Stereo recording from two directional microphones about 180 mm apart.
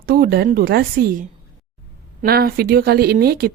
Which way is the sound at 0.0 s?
60° right (ahead or behind).